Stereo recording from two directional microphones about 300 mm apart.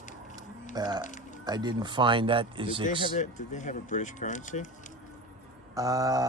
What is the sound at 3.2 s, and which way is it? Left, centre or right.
Speech, left.